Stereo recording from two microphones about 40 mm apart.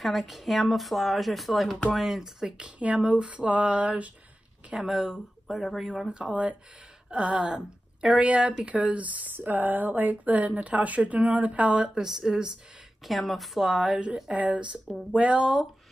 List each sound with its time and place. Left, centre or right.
0.0 s speech: centre
2.6 s speech: right
4.7 s speech: centre
6.1 s speech: right
8.1 s speech: right
9.3 s speech: right; by 12.5 s centre
13.0 s speech: centre
13.7 s speech: centre
14.3 s speech: right
14.9 s speech: centre
15.1 s speech: right